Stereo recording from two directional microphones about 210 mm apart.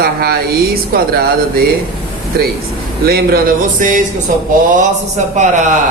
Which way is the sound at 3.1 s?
45° right (ahead or behind).